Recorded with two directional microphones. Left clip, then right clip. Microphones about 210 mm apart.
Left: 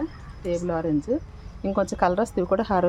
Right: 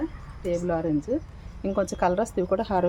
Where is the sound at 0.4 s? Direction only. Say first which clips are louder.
Even; 20° left (ahead or behind).